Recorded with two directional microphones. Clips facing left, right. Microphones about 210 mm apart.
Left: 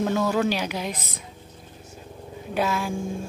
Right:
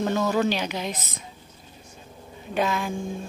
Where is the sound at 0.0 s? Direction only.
5° left (ahead or behind).